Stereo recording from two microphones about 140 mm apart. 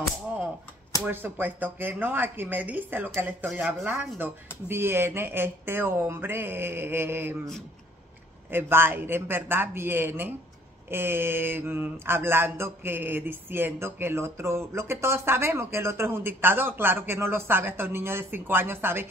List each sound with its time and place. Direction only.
1.0 s speech: 15° right (ahead or behind)
3.4 s speech: centre (ahead or behind)
3.8 s speech: 15° right (ahead or behind)
8.5 s speech: 15° right (ahead or behind)